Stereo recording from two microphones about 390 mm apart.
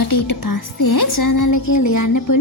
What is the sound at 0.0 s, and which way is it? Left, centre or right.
A woman's voice, left.